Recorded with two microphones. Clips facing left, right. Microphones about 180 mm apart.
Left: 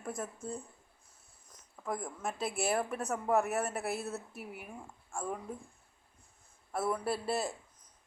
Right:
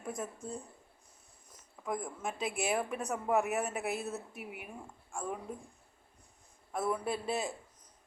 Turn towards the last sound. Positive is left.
turn(degrees=5)  # may be behind; listen again after turning